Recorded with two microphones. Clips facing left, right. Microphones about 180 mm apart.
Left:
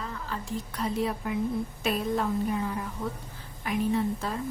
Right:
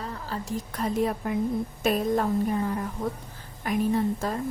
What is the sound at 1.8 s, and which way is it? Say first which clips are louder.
A woman's voice: right 5 dB; 45° right (ahead or behind).